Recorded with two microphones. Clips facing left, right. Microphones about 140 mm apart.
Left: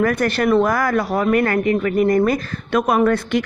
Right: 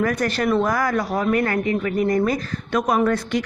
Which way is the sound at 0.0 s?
60° left (ahead or behind).